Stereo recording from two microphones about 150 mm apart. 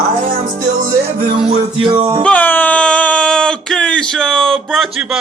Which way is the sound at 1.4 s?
35° right (ahead or behind).